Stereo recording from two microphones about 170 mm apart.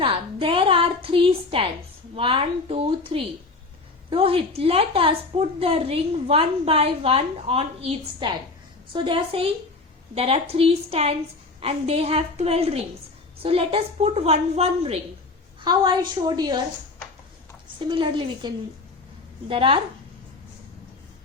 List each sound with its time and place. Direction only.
0.0 s a woman's voice: 30° right (ahead or behind)
15.6 s a woman's voice: 25° right (ahead or behind)
17.8 s a woman's voice: 30° right (ahead or behind)